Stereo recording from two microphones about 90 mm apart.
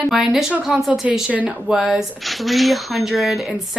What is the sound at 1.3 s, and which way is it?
Speech, 15° right (ahead or behind).